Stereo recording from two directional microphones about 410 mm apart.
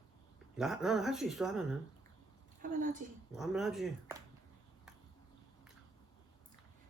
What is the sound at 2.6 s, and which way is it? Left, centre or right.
Speech, centre.